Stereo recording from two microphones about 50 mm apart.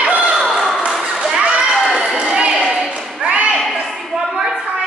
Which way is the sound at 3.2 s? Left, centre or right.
Right.